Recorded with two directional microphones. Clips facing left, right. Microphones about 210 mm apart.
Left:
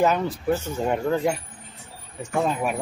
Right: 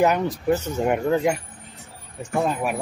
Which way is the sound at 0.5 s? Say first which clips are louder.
Right 3 dB; 20° right (ahead or behind).